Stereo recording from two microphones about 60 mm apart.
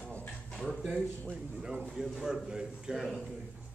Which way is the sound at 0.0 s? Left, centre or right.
Left.